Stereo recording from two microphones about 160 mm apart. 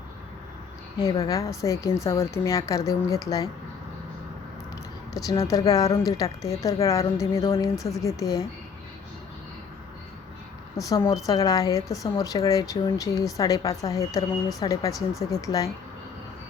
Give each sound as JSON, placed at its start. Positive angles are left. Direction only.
{"t": 1.2, "sound": "speech", "side_deg": 20}
{"t": 5.1, "sound": "speech", "side_deg": 20}
{"t": 10.8, "sound": "speech", "side_deg": 20}